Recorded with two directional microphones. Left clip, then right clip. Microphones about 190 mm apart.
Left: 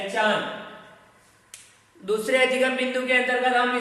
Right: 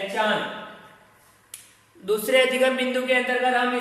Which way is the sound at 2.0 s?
15° right (ahead or behind).